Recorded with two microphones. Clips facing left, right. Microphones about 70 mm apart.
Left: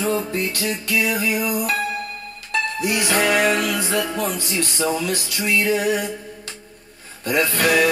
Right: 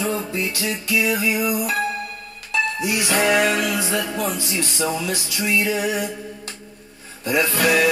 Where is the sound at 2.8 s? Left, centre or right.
Left.